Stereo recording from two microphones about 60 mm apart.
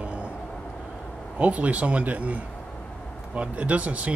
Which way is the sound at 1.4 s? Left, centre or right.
Right.